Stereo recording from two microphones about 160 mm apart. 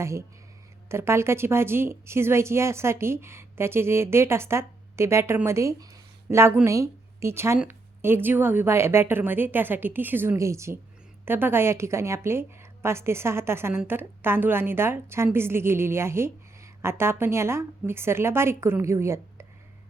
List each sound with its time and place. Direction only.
0.0 s a woman's voice: 20° right (ahead or behind)